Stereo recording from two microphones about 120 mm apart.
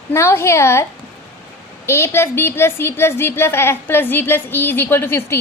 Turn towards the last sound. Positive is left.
turn(degrees=20)  # may be behind; listen again after turning